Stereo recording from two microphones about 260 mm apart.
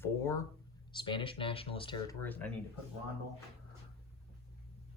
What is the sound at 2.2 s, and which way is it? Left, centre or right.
Speech, centre.